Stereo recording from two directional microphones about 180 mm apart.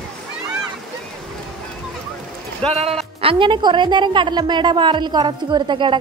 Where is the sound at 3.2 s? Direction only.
25° right (ahead or behind).